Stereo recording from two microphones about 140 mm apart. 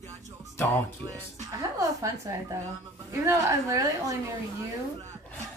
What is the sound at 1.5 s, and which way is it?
A woman's voice, 20° right (ahead or behind).